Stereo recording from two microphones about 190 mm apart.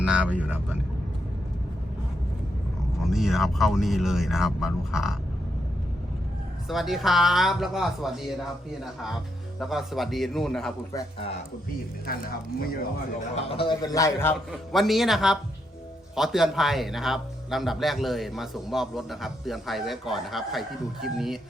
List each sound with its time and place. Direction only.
0.0 s speech: 5° right (ahead or behind)
3.0 s a man's voice: centre (ahead or behind)
6.7 s a man's voice: centre (ahead or behind)
9.6 s a man's voice: centre (ahead or behind)
13.5 s a man's voice: 25° left (ahead or behind)
14.5 s a man's voice: centre (ahead or behind)